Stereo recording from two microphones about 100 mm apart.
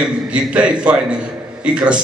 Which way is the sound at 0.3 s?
10° right (ahead or behind).